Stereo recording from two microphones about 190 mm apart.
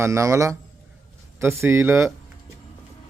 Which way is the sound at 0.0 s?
15° right (ahead or behind).